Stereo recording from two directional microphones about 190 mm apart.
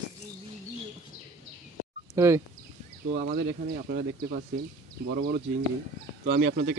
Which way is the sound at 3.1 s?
55° right (ahead or behind).